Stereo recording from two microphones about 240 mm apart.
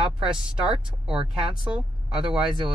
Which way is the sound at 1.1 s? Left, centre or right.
Right.